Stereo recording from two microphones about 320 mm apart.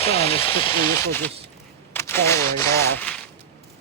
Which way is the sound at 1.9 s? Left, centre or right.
Centre.